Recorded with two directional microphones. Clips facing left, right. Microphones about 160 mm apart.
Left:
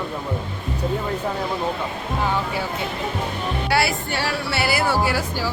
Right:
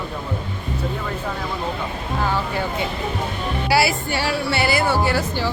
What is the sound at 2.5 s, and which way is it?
Speech, 5° left (ahead or behind).